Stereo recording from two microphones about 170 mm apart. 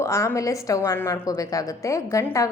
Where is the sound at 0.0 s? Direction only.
15° left (ahead or behind).